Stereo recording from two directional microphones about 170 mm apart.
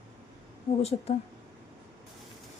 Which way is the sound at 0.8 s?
40° left (ahead or behind).